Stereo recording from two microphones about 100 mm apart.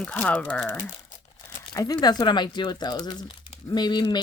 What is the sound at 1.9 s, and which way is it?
Speech, 45° left (ahead or behind).